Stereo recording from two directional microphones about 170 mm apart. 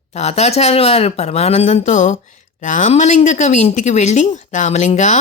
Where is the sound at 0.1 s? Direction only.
40° left (ahead or behind).